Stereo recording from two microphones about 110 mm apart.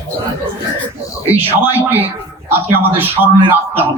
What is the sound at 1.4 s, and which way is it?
Speech, 20° right (ahead or behind).